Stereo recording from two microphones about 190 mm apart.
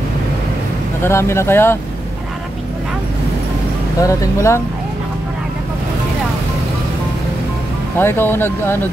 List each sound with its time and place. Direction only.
1.0 s speech: 15° left (ahead or behind)
4.0 s speech: 15° left (ahead or behind)
8.0 s speech: 10° left (ahead or behind)